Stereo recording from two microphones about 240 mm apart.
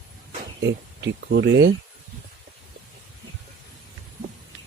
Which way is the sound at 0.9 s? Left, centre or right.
Right.